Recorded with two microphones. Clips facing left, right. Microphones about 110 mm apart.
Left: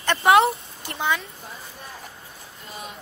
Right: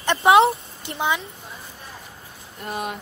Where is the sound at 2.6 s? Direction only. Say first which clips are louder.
Right 10 dB; 65° right (ahead or behind).